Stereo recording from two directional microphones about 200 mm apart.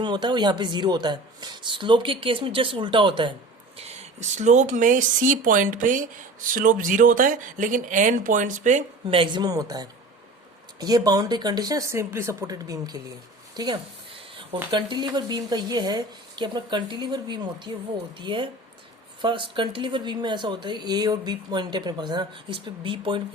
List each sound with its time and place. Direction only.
0.0 s speech: 20° right (ahead or behind)
3.8 s speech: 35° right (ahead or behind)